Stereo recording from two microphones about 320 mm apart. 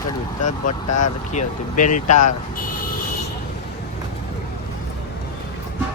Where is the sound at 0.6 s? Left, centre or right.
Left.